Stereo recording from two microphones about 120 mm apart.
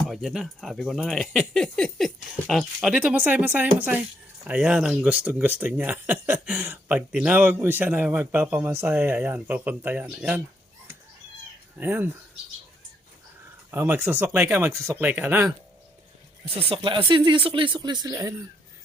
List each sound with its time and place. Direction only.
0.1 s speech: centre (ahead or behind)
11.8 s speech: 15° right (ahead or behind)
13.7 s speech: 20° right (ahead or behind)
16.6 s speech: 50° right (ahead or behind)
18.1 s speech: 25° right (ahead or behind)